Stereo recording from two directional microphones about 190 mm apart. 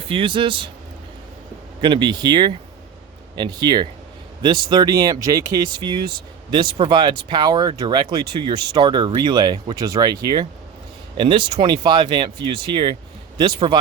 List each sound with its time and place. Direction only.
0.1 s speech: 25° right (ahead or behind)
1.8 s speech: 25° right (ahead or behind)